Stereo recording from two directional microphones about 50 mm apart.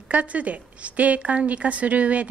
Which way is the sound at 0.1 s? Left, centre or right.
Right.